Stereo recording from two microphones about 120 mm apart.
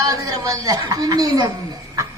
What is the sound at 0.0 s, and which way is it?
A woman's voice, 30° right (ahead or behind).